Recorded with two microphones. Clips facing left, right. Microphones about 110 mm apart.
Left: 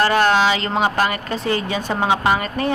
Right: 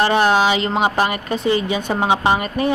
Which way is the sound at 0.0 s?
15° right (ahead or behind).